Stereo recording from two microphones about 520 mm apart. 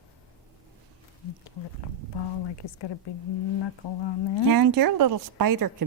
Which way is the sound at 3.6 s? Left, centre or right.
Left.